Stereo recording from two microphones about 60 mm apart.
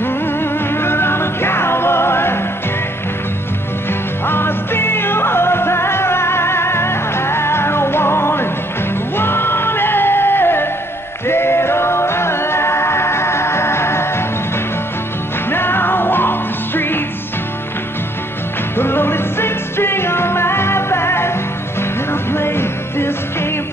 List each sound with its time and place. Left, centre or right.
0.0 s music: left
4.3 s music: left
15.5 s music: left
18.8 s music: left